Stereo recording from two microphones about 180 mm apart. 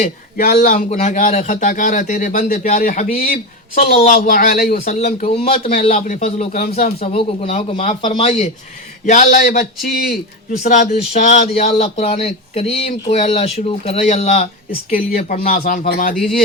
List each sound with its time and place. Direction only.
0.0 s speech: 45° left (ahead or behind)
5.3 s speech: 30° left (ahead or behind)
5.9 s speech: 45° left (ahead or behind)
10.6 s speech: 40° left (ahead or behind)
14.8 s speech: 50° left (ahead or behind)